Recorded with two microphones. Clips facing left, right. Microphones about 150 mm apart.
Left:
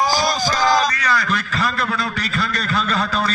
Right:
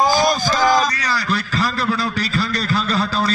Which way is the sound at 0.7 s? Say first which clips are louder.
Even; 35° right (ahead or behind).